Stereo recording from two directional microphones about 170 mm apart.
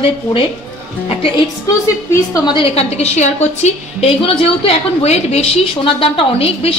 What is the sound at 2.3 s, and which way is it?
A woman's voice, 30° left (ahead or behind).